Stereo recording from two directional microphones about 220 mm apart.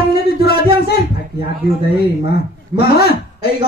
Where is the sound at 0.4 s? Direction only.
45° left (ahead or behind).